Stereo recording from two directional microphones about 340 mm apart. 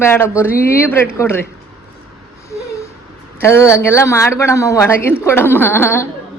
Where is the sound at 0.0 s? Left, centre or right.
Centre.